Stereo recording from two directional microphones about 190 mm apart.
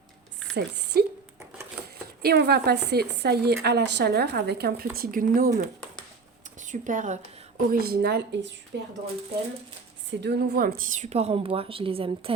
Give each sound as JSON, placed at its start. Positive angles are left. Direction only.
{"t": 0.5, "sound": "speech", "side_deg": -65}
{"t": 2.2, "sound": "speech", "side_deg": -60}
{"t": 7.7, "sound": "speech", "side_deg": -55}
{"t": 10.1, "sound": "speech", "side_deg": -60}